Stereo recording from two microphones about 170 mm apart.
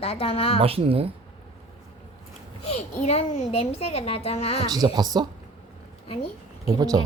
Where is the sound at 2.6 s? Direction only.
40° left (ahead or behind).